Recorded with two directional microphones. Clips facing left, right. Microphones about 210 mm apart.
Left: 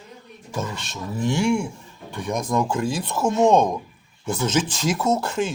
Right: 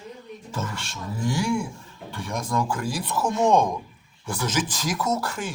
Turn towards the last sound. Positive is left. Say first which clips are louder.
# left 5 dB
turn(degrees=25)  # may be behind; listen again after turning